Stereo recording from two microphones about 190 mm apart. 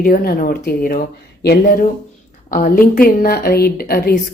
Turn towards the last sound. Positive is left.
turn(degrees=50)  # may be behind; listen again after turning